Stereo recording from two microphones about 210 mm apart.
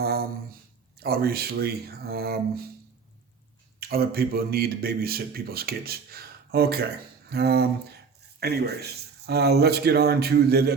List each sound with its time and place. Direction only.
0.0 s a sound: 45° right (ahead or behind)
0.9 s speech: 45° right (ahead or behind)
3.8 s speech: 45° right (ahead or behind)